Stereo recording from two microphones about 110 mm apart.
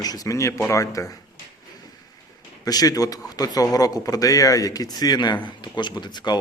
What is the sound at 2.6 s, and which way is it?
Speech, 35° left (ahead or behind).